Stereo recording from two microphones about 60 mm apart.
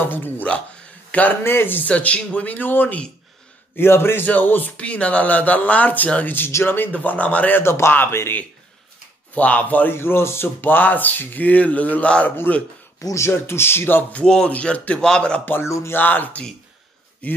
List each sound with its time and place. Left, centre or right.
0.0 s speech: left
1.9 s speech: left
4.3 s speech: left
6.5 s speech: left
7.6 s speech: left
9.3 s speech: left
9.9 s speech: left
13.2 s speech: left
14.2 s a man's voice: centre
15.6 s speech: left
16.0 s speech: left